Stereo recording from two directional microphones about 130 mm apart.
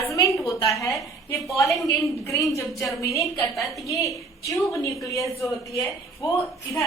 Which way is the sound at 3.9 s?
25° left (ahead or behind).